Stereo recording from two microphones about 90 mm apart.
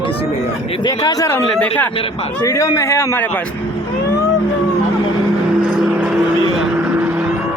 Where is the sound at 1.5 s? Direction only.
15° left (ahead or behind).